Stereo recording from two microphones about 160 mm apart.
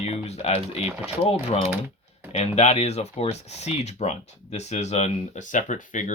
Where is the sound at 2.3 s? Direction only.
40° left (ahead or behind).